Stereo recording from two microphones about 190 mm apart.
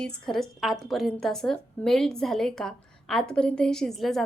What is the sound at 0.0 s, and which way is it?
A woman's voice, 5° left (ahead or behind).